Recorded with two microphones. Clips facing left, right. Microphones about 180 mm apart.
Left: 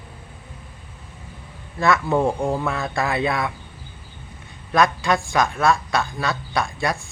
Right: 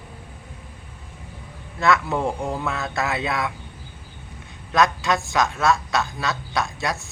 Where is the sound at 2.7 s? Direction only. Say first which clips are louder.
Left 2 dB; centre (ahead or behind).